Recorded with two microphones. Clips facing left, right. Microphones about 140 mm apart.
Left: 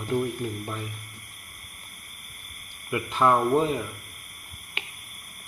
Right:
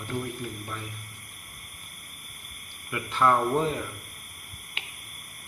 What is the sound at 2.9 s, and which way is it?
Speech, 15° left (ahead or behind).